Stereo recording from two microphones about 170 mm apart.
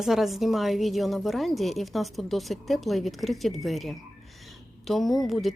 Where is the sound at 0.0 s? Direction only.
Centre (ahead or behind).